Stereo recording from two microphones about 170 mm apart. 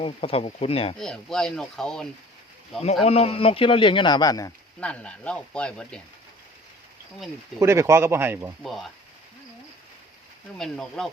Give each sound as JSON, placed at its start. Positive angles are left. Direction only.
{"t": 0.0, "sound": "a man's voice", "side_deg": 35}
{"t": 0.9, "sound": "speech", "side_deg": 0}
{"t": 3.0, "sound": "a man's voice", "side_deg": 35}
{"t": 4.8, "sound": "speech", "side_deg": 5}
{"t": 7.6, "sound": "speech", "side_deg": -15}
{"t": 8.6, "sound": "speech", "side_deg": 0}
{"t": 10.6, "sound": "speech", "side_deg": 5}